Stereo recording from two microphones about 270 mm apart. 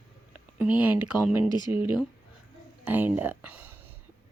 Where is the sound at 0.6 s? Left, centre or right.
Centre.